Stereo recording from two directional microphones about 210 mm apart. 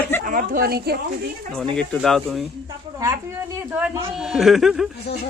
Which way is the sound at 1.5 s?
5° left (ahead or behind).